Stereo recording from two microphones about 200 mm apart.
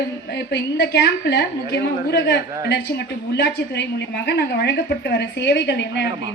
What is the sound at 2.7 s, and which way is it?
A woman's voice, 60° left (ahead or behind).